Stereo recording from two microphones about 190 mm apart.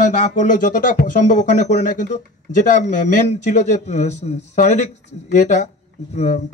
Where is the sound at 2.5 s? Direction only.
40° left (ahead or behind).